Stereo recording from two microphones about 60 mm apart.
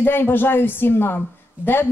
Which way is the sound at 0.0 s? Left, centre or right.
Left.